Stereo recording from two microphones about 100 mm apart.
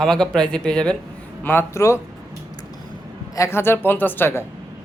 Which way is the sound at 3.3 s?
25° left (ahead or behind).